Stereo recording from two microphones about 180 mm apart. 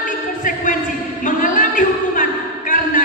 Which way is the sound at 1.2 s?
45° left (ahead or behind).